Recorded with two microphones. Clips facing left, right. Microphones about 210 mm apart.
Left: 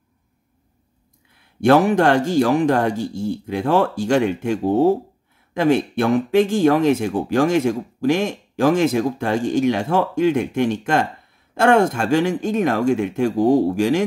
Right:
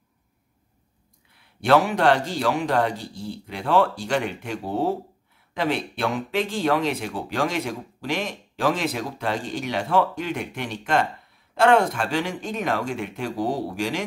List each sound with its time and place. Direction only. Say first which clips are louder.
1.7 s speech: left 4 dB; 50° left (ahead or behind)